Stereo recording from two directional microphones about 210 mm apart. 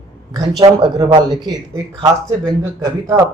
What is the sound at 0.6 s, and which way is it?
Speech, 20° right (ahead or behind).